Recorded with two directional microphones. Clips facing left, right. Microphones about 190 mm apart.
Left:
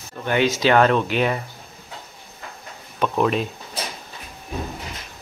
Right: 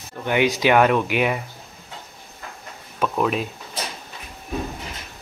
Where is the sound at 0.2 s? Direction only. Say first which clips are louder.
Even; 15° right (ahead or behind).